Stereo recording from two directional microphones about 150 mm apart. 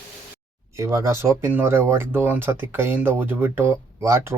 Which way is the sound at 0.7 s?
20° right (ahead or behind).